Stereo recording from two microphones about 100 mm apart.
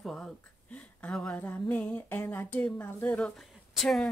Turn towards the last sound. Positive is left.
turn(degrees=0)  # may be behind; listen again after turning